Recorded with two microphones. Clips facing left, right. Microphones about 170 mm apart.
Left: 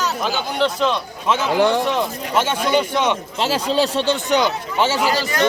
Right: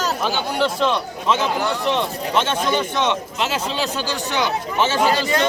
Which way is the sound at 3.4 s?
35° left (ahead or behind).